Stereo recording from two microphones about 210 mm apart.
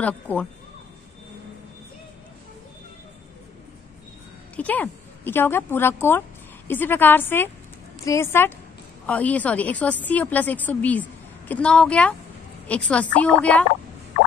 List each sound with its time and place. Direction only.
0.0 s speech: 5° left (ahead or behind)
4.6 s speech: 5° left (ahead or behind)